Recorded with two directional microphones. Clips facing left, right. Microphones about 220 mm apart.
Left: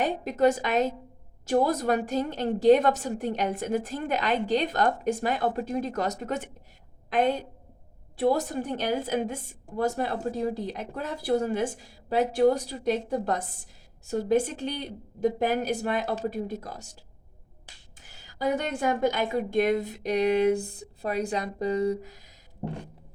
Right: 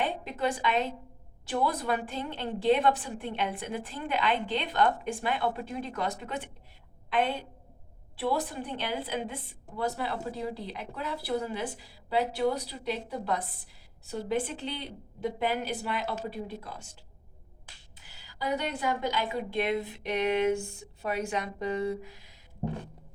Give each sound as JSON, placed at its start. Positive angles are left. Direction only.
{"t": 0.0, "sound": "a woman's voice", "side_deg": 45}
{"t": 17.9, "sound": "a woman's voice", "side_deg": 50}